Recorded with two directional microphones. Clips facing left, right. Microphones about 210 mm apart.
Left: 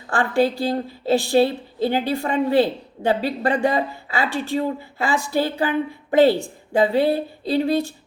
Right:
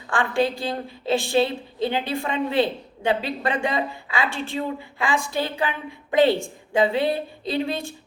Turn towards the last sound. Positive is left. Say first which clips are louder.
# left 6 dB
turn(degrees=35)  # may be behind; listen again after turning